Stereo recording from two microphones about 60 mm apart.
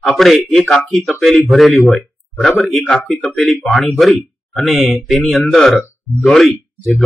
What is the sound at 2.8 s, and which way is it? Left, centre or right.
Speech, left.